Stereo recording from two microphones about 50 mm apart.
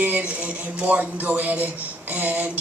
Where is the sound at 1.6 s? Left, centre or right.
Right.